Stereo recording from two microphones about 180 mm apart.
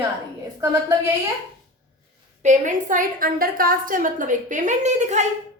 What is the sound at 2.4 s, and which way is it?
A woman's voice, 45° right (ahead or behind).